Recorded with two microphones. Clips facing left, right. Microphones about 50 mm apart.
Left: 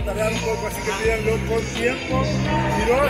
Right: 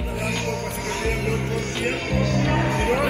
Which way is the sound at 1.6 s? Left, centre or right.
Centre.